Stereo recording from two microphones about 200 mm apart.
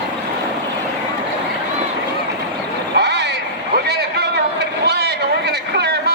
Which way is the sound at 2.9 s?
55° right (ahead or behind).